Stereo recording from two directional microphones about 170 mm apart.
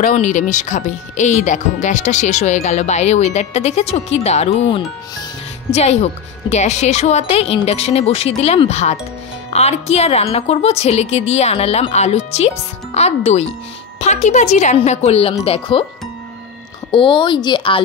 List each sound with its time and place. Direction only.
0.0 s speech: 45° left (ahead or behind); by 5.2 s 30° left (ahead or behind)
5.7 s speech: 40° left (ahead or behind)
16.9 s speech: 30° left (ahead or behind)